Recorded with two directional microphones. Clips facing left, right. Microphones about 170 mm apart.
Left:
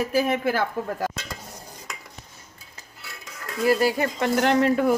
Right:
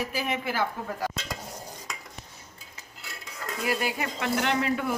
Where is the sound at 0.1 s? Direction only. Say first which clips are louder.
Left 8 dB; 45° left (ahead or behind).